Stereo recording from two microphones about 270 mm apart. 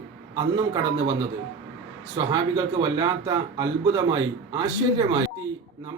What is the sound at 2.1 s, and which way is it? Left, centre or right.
Speech, centre.